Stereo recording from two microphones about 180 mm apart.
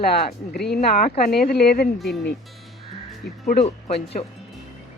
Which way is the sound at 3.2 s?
75° left (ahead or behind).